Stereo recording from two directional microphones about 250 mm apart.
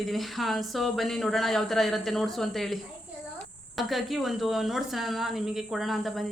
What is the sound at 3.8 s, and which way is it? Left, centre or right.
Speech, centre.